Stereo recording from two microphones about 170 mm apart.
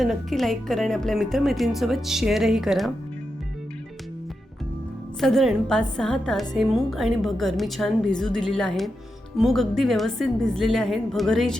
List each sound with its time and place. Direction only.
0.0 s a woman's voice: centre (ahead or behind)
5.2 s a woman's voice: centre (ahead or behind)